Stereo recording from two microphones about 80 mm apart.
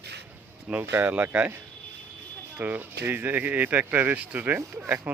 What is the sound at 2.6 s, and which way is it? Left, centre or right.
Speech, right.